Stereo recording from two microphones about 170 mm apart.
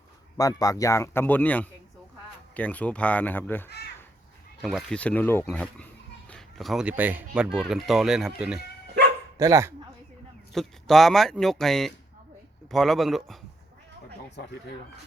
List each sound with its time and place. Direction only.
0.3 s speech: 20° left (ahead or behind)
4.6 s speech: centre (ahead or behind)
9.4 s speech: 20° right (ahead or behind)
10.5 s speech: centre (ahead or behind)